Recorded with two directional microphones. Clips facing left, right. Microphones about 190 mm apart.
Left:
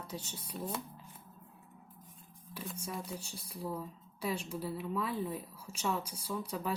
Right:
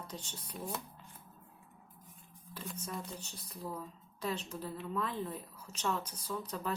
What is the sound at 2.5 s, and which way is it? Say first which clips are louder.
Speech: left 1 dB; 10° left (ahead or behind).